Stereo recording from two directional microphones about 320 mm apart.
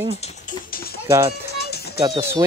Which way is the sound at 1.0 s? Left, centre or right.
Centre.